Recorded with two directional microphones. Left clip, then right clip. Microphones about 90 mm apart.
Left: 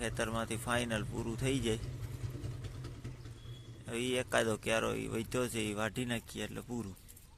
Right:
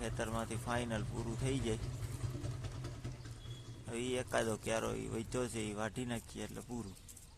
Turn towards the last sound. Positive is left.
turn(degrees=25)  # may be behind; listen again after turning